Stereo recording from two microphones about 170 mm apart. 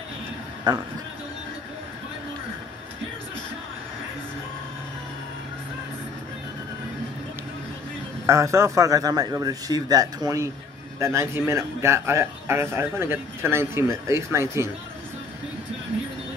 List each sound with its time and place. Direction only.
0.7 s a man's voice: 25° right (ahead or behind)
8.3 s a man's voice: 15° right (ahead or behind)